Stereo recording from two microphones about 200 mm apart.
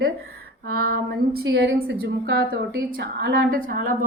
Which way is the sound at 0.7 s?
50° right (ahead or behind).